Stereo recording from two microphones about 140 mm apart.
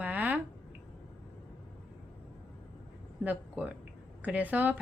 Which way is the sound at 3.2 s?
10° right (ahead or behind).